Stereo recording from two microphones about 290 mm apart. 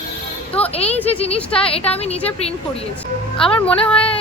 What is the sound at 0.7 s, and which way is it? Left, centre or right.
Speech, left.